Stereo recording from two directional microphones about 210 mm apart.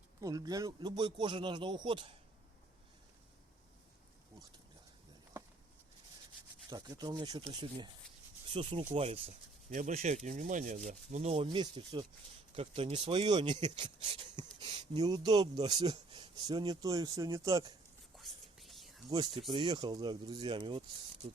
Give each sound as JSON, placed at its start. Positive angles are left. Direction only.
{"t": 0.2, "sound": "speech", "side_deg": -15}
{"t": 6.7, "sound": "speech", "side_deg": -20}
{"t": 18.2, "sound": "whispering", "side_deg": 0}
{"t": 19.1, "sound": "speech", "side_deg": -20}